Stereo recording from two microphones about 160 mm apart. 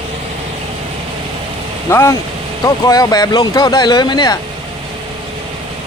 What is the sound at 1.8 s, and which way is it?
Speech, 15° left (ahead or behind).